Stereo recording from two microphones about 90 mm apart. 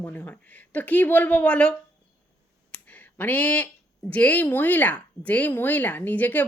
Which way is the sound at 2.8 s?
20° left (ahead or behind).